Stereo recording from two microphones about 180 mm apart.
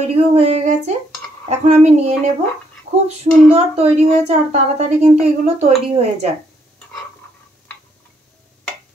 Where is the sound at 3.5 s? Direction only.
35° right (ahead or behind).